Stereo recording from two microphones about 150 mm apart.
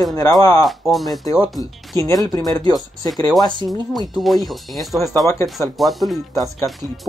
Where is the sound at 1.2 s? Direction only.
25° left (ahead or behind).